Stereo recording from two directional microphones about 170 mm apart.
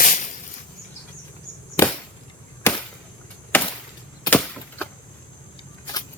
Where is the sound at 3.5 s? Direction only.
10° left (ahead or behind).